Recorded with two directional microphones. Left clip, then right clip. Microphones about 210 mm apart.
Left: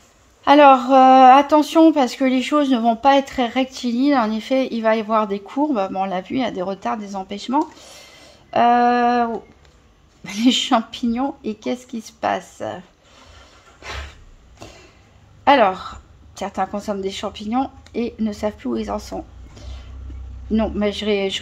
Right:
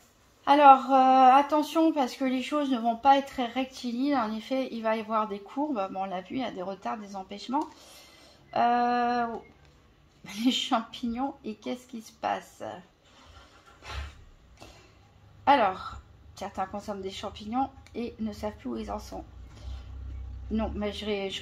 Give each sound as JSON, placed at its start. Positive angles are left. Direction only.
{"t": 0.4, "sound": "a woman's voice", "side_deg": 45}
{"t": 13.7, "sound": "a sound", "side_deg": 40}
{"t": 15.4, "sound": "a woman's voice", "side_deg": 40}